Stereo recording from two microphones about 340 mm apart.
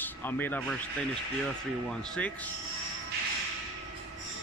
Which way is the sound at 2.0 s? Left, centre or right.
Centre.